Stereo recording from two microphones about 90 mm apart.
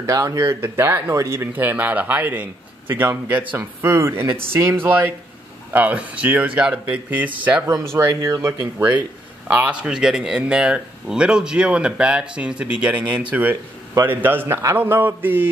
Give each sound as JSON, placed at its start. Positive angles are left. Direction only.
{"t": 0.0, "sound": "a man's voice", "side_deg": -40}
{"t": 1.5, "sound": "a man's voice", "side_deg": -20}
{"t": 5.7, "sound": "speech", "side_deg": -15}
{"t": 7.6, "sound": "speech", "side_deg": -35}
{"t": 9.5, "sound": "a man's voice", "side_deg": -15}